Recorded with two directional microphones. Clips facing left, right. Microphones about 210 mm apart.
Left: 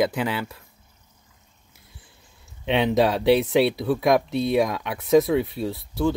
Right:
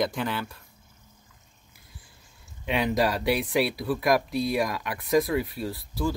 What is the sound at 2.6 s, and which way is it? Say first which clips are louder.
Speech: left 5 dB; 25° left (ahead or behind).